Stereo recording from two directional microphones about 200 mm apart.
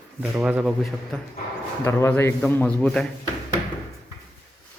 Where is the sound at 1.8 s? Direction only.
10° left (ahead or behind).